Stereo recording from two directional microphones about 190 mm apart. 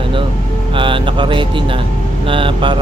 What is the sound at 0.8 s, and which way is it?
Music, 25° right (ahead or behind).